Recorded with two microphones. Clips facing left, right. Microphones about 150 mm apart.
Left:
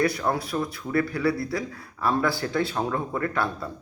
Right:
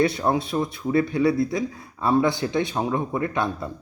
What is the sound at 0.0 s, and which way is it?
Speech, 25° right (ahead or behind).